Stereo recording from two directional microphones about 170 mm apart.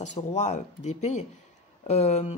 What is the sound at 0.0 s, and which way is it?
Speech, 45° left (ahead or behind).